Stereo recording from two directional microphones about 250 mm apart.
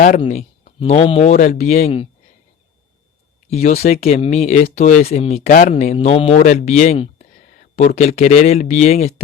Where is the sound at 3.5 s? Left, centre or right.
Left.